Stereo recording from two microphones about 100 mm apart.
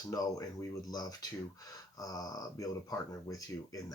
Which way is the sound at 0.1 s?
35° left (ahead or behind).